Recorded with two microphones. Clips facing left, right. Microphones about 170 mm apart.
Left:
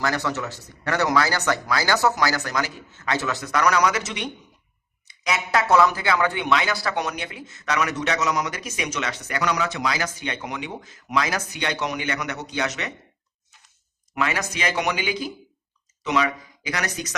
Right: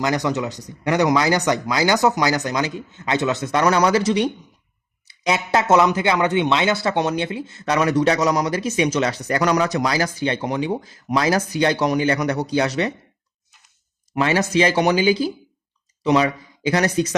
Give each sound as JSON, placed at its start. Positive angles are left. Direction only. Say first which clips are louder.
{"t": 0.0, "sound": "speech", "louder": "right 4 dB", "side_deg": -20}
{"t": 14.2, "sound": "speech", "louder": "right 8 dB", "side_deg": -30}